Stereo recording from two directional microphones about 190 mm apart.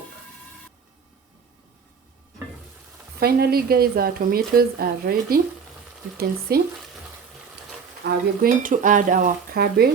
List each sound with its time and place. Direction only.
3.2 s a woman's voice: 55° right (ahead or behind)
8.0 s a woman's voice: 55° right (ahead or behind)